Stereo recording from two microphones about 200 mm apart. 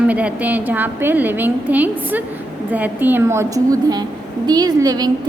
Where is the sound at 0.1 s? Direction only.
5° right (ahead or behind).